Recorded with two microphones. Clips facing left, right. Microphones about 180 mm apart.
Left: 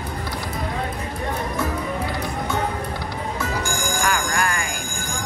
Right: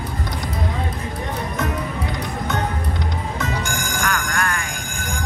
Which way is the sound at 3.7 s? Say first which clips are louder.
Left 1 dB; 65° right (ahead or behind).